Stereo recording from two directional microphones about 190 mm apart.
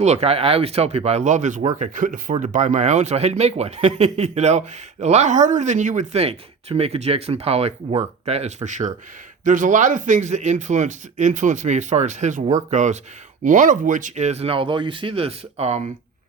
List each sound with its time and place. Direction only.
0.0 s speech: 35° right (ahead or behind)